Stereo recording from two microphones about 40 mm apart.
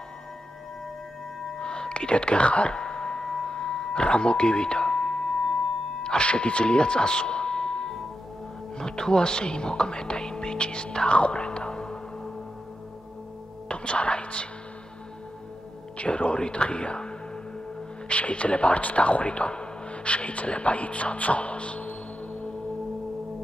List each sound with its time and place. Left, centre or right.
1.6 s a sound: left
8.7 s speech: centre
13.7 s speech: left
16.0 s speech: left